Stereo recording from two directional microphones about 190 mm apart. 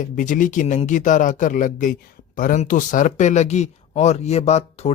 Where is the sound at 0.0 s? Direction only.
45° left (ahead or behind).